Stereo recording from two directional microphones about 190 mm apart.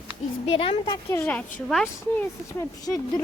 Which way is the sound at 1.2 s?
5° left (ahead or behind).